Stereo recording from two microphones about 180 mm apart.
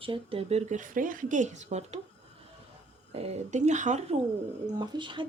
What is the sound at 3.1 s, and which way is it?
A woman's voice, 35° right (ahead or behind).